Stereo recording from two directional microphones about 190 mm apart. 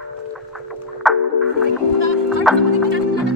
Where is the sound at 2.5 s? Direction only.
Centre (ahead or behind).